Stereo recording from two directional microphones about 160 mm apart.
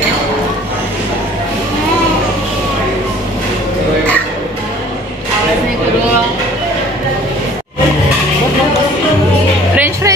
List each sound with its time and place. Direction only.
9.8 s music: 15° right (ahead or behind)